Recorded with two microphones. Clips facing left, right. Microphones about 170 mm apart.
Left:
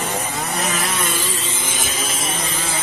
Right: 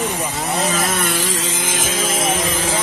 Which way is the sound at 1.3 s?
90° right.